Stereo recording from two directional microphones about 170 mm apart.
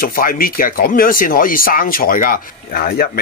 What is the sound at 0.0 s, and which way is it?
Speech, 60° left (ahead or behind).